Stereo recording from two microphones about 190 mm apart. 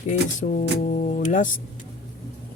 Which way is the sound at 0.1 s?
40° left (ahead or behind).